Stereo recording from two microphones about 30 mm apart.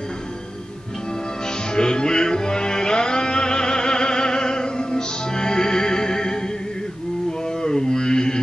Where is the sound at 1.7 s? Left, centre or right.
Left.